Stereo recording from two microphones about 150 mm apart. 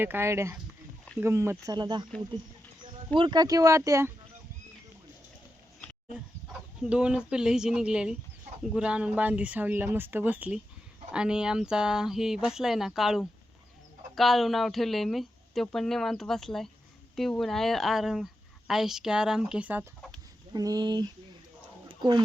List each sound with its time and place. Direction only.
0.0 s speech: 15° right (ahead or behind)
3.2 s speech: 30° right (ahead or behind)
6.8 s a woman's voice: 5° right (ahead or behind)
20.5 s speech: 25° right (ahead or behind)
21.8 s a sound: 30° right (ahead or behind)